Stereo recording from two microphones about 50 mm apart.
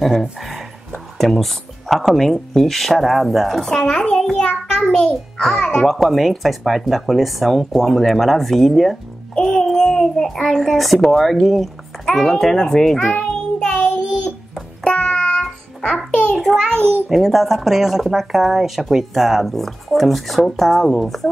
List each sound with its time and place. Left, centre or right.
0.0 s a child's voice: centre
5.9 s a child's voice: centre
13.2 s child singing: centre
13.8 s child singing: centre
14.8 s music: centre
16.3 s a child's voice: centre
17.1 s speech: centre